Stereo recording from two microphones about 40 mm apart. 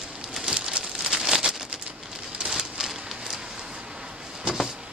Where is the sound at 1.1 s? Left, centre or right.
Centre.